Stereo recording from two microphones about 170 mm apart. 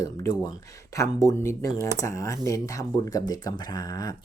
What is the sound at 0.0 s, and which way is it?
Speech, 20° left (ahead or behind).